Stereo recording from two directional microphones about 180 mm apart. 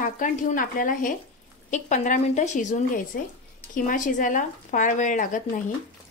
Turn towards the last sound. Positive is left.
turn(degrees=45)  # may be behind; listen again after turning